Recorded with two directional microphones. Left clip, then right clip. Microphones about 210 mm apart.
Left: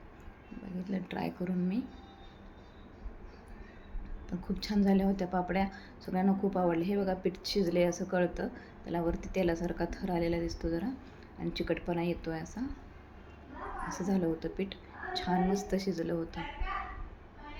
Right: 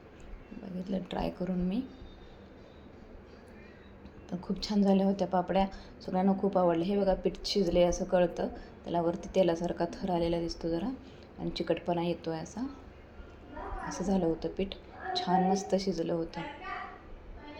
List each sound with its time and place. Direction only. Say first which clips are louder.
0.9 s a woman's voice: right 3 dB; 5° left (ahead or behind)
4.3 s a woman's voice: right 2 dB; 10° left (ahead or behind)
13.8 s a woman's voice: right 3 dB; 5° left (ahead or behind)